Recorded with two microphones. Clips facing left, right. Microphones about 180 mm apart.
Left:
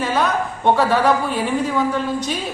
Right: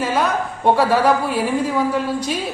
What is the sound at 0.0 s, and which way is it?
A man's voice, 10° right (ahead or behind).